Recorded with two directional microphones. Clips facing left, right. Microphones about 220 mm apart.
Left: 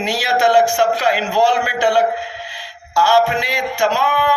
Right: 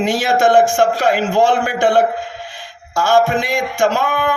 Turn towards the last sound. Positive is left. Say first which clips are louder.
# right 1 dB
turn(degrees=-50)  # may be behind; listen again after turning